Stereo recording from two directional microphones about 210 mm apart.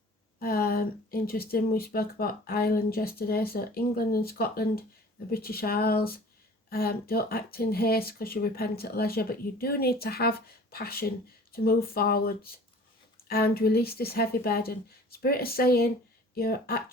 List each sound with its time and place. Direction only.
0.3 s speech: 45° left (ahead or behind)